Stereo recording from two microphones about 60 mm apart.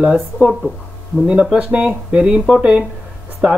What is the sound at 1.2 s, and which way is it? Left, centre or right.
Speech, right.